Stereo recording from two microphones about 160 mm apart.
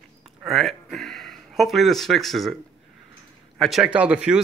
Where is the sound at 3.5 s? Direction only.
Centre (ahead or behind).